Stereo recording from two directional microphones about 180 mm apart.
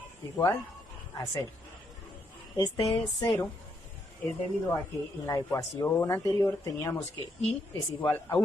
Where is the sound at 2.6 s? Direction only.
20° left (ahead or behind).